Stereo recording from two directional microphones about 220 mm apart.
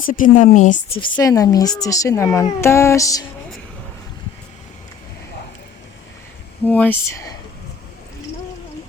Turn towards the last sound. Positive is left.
turn(degrees=10)  # may be behind; listen again after turning